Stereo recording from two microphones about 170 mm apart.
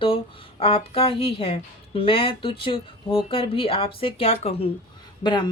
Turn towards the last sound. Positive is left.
turn(degrees=25)  # may be behind; listen again after turning